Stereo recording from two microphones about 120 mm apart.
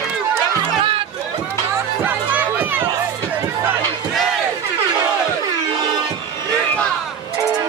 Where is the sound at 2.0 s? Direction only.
15° right (ahead or behind).